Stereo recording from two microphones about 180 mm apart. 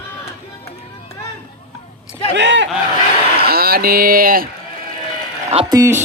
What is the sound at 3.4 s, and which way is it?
Speech, 60° right (ahead or behind).